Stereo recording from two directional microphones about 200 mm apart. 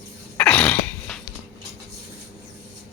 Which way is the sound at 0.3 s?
5° left (ahead or behind).